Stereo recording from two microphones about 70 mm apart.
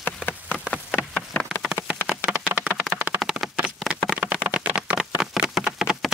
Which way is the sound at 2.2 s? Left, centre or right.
Right.